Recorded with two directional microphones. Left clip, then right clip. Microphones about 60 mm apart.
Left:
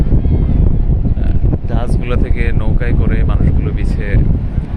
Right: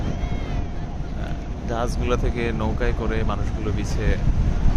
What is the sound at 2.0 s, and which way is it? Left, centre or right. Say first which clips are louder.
Speech: left 3 dB; centre.